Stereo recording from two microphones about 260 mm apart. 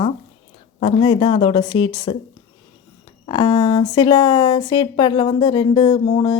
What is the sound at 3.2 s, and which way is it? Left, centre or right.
Speech, centre.